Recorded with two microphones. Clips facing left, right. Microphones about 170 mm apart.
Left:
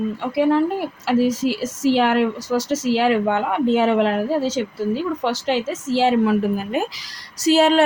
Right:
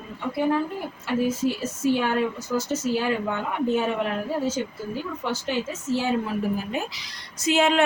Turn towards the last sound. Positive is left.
turn(degrees=35)  # may be behind; listen again after turning